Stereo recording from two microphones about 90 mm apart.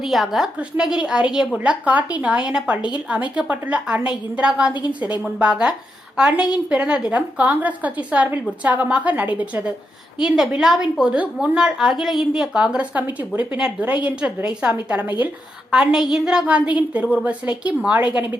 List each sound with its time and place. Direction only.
0.0 s a woman's voice: centre (ahead or behind)
10.2 s a woman's voice: 5° right (ahead or behind)